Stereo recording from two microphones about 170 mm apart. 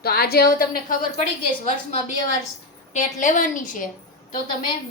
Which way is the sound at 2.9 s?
45° left (ahead or behind).